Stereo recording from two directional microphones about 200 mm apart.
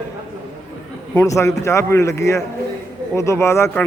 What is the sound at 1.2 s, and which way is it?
A man's voice, 15° left (ahead or behind).